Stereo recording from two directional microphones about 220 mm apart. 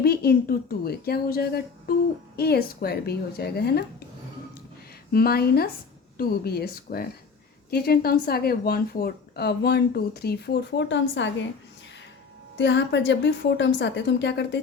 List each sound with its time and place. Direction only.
0.0 s a woman's voice: 45° left (ahead or behind)
5.1 s a woman's voice: 45° left (ahead or behind)
12.5 s a woman's voice: 55° left (ahead or behind)